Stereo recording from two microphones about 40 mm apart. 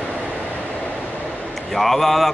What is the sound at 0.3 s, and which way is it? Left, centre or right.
Vehicle, left.